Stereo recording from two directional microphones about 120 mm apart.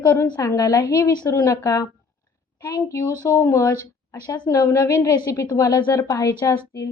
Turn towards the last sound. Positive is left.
turn(degrees=25)  # may be behind; listen again after turning